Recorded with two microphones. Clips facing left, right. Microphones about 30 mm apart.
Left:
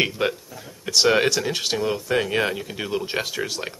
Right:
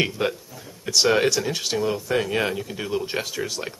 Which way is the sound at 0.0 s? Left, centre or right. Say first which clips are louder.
Left 1 dB; centre.